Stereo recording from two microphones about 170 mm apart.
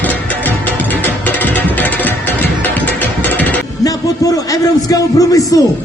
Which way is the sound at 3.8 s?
20° left (ahead or behind).